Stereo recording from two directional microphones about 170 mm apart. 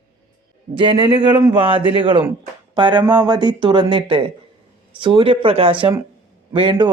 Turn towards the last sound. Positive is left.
turn(degrees=-25)  # may be behind; listen again after turning